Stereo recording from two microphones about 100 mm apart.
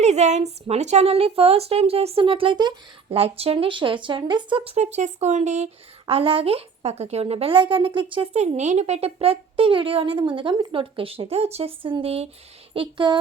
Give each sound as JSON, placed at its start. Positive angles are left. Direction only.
{"t": 0.0, "sound": "a woman's voice", "side_deg": -90}
{"t": 3.1, "sound": "speech", "side_deg": -80}
{"t": 6.1, "sound": "speech", "side_deg": -70}
{"t": 8.1, "sound": "speech", "side_deg": -80}
{"t": 12.7, "sound": "speech", "side_deg": -60}